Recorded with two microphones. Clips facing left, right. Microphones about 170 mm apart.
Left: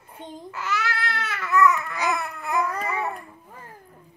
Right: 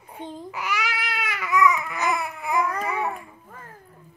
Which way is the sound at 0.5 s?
15° right (ahead or behind).